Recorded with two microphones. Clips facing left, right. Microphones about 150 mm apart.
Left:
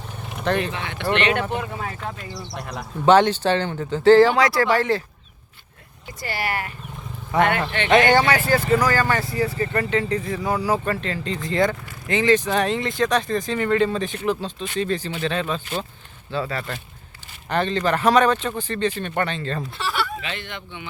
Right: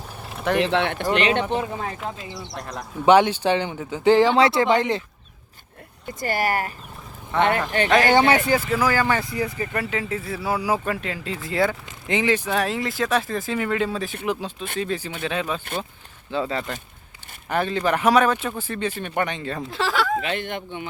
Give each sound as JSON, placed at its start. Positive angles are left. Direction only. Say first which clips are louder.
{"t": 0.2, "sound": "vehicle", "louder": "even", "side_deg": -5}
{"t": 0.6, "sound": "speech", "louder": "right 7 dB", "side_deg": -70}
{"t": 1.2, "sound": "speech", "louder": "right 1 dB", "side_deg": -25}
{"t": 2.6, "sound": "speech", "louder": "even", "side_deg": 5}
{"t": 3.1, "sound": "speech", "louder": "even", "side_deg": -10}
{"t": 6.1, "sound": "speech", "louder": "right 4 dB", "side_deg": -45}
{"t": 7.3, "sound": "speech", "louder": "left 1 dB", "side_deg": -30}
{"t": 7.9, "sound": "speech", "louder": "left 1 dB", "side_deg": 0}
{"t": 11.9, "sound": "speech", "louder": "left 3 dB", "side_deg": -20}
{"t": 19.7, "sound": "fowl", "louder": "right 7 dB", "side_deg": -90}
{"t": 20.2, "sound": "speech", "louder": "right 6 dB", "side_deg": -50}